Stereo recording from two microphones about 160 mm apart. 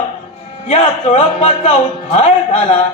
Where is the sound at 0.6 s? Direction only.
40° left (ahead or behind).